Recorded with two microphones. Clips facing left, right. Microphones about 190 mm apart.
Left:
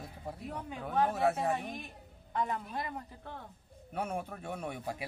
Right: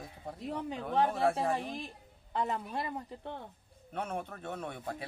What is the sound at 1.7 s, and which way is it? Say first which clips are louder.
A woman's voice: right 3 dB; 30° right (ahead or behind).